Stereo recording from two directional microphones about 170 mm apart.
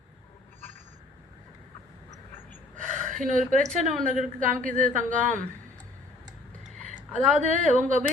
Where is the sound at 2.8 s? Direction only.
50° right (ahead or behind).